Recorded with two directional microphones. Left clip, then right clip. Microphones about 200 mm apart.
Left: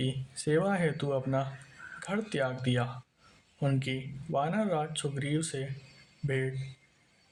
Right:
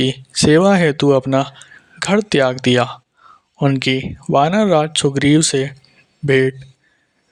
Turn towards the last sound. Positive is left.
turn(degrees=-45)  # may be behind; listen again after turning